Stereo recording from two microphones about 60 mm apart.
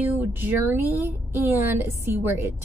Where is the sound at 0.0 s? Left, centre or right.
Right.